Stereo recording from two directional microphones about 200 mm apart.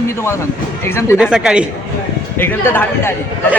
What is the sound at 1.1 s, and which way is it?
Speech, 5° right (ahead or behind).